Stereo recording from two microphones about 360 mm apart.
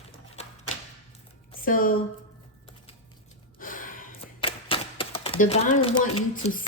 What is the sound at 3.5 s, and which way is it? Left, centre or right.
Gasp, left.